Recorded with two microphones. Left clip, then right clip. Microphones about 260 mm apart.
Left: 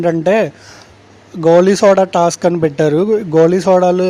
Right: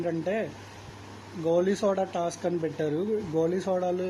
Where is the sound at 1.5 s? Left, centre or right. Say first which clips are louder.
Left 17 dB; left.